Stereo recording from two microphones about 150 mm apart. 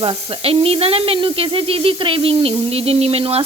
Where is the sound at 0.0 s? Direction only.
35° right (ahead or behind).